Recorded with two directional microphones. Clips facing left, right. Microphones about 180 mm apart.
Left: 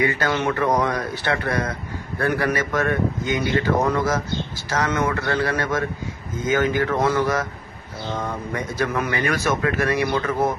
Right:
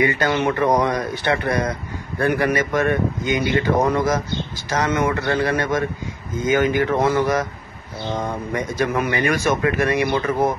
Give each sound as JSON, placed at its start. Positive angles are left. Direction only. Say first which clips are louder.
{"t": 0.0, "sound": "speech", "louder": "right 3 dB", "side_deg": -20}